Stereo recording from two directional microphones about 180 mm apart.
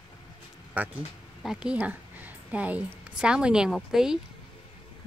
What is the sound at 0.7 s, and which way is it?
A woman's voice, 10° right (ahead or behind).